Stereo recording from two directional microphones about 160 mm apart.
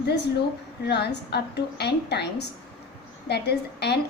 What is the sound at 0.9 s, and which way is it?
A woman's voice, 90° left.